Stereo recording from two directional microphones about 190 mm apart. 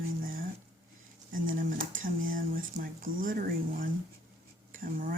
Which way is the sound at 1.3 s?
45° right (ahead or behind).